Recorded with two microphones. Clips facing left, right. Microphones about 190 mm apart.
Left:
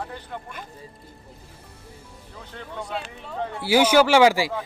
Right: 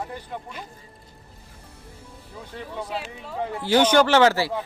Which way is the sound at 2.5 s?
5° right (ahead or behind).